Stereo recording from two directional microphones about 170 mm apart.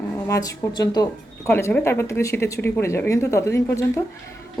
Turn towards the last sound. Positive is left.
turn(degrees=15)  # may be behind; listen again after turning